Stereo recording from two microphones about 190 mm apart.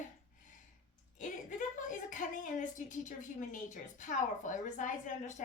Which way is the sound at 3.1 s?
40° left (ahead or behind).